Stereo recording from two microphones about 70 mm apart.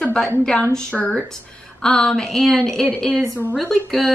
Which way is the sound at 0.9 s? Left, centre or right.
Left.